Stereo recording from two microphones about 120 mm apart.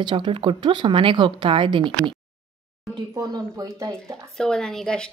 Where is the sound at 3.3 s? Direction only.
30° right (ahead or behind).